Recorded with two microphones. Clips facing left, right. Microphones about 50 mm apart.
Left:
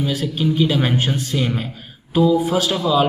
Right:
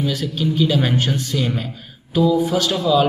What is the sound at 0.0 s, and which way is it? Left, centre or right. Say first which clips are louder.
A man's voice: left 1 dB; centre.